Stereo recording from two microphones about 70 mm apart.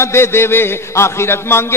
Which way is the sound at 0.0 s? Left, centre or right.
Left.